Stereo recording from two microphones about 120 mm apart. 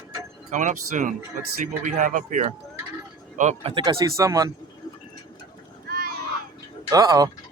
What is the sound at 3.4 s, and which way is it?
Speech, 75° right (ahead or behind).